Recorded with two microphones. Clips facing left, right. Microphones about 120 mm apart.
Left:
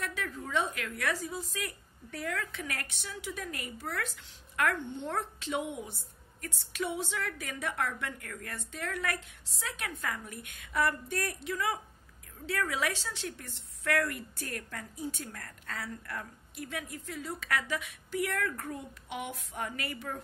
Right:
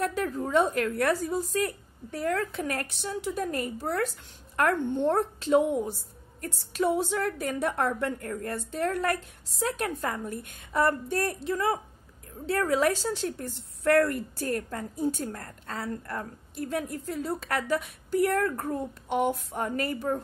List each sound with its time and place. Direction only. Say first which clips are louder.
0.0 s a woman's voice: right 9 dB; 40° right (ahead or behind)